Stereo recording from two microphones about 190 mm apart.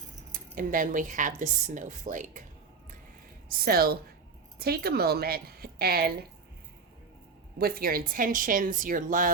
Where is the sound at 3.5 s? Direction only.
50° right (ahead or behind).